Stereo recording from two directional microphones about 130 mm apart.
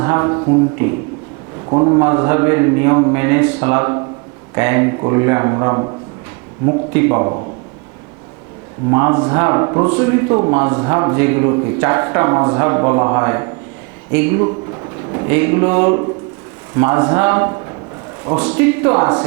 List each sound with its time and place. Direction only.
0.0 s speech: 25° right (ahead or behind)
6.9 s speech: 25° right (ahead or behind)
8.9 s speech: 25° right (ahead or behind)